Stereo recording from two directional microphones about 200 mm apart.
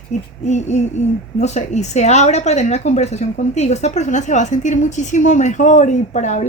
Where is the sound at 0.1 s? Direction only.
35° left (ahead or behind).